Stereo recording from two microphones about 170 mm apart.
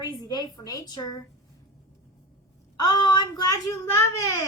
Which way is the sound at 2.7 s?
25° left (ahead or behind).